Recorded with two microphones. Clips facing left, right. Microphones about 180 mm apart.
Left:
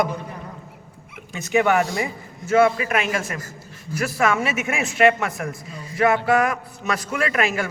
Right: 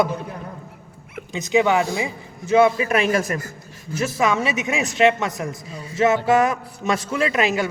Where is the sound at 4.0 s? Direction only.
20° right (ahead or behind).